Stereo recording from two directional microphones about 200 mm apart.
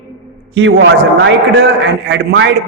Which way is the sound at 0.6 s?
70° right (ahead or behind).